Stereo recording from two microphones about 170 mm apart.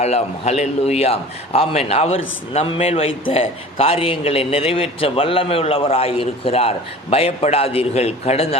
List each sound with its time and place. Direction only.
0.0 s a man's voice: 40° left (ahead or behind)